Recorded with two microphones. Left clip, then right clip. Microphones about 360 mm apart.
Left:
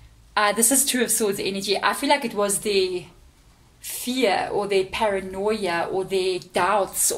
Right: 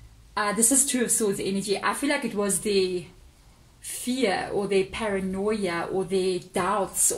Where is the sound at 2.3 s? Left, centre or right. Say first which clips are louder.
Left 3 dB; left.